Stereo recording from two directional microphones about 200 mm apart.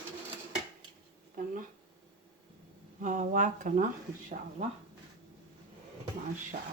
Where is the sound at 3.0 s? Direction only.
40° right (ahead or behind).